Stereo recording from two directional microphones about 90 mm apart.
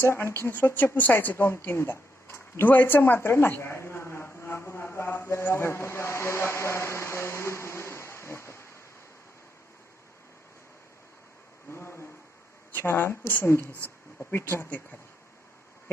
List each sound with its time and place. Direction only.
0.0 s a woman's voice: 25° left (ahead or behind)
4.4 s vehicle: 25° left (ahead or behind)
11.7 s a sound: 30° left (ahead or behind)
12.7 s a woman's voice: 25° left (ahead or behind)
13.8 s a sound: 15° left (ahead or behind)
14.3 s a woman's voice: 20° left (ahead or behind)